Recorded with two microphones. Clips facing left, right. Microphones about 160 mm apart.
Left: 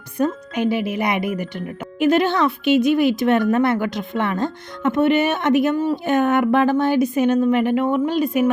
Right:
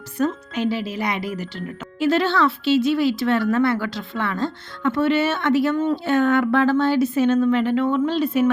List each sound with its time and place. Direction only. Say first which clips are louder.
0.2 s speech: left 2 dB; 15° left (ahead or behind)